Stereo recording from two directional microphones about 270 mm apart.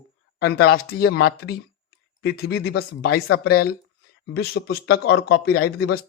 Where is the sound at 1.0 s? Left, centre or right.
Left.